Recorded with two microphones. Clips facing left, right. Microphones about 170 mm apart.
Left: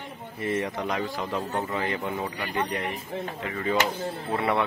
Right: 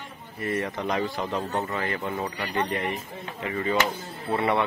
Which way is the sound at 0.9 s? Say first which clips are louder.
Right 2 dB; centre (ahead or behind).